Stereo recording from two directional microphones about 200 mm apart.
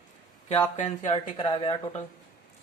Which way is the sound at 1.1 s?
25° left (ahead or behind).